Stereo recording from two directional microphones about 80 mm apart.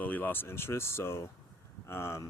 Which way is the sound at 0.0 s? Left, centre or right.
Left.